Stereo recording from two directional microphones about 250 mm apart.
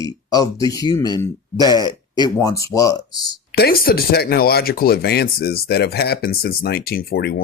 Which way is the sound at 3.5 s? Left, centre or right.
Left.